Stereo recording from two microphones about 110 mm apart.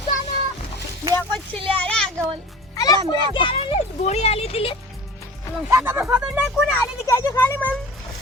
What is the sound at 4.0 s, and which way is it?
Speech, 75° left (ahead or behind).